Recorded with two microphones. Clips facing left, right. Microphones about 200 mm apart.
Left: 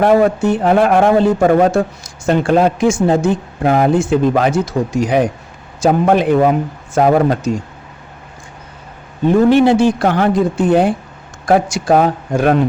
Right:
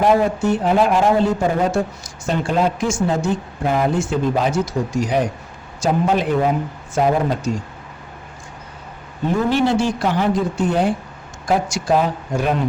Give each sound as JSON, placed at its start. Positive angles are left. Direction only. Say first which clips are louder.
{"t": 0.0, "sound": "a man's voice", "louder": "left 5 dB", "side_deg": 60}
{"t": 9.5, "sound": "a man's voice", "louder": "left 6 dB", "side_deg": 60}